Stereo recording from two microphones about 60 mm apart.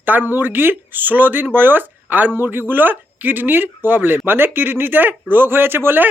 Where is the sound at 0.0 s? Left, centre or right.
Right.